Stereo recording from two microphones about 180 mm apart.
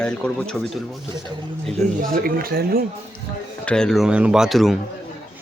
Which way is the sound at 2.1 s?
55° right (ahead or behind).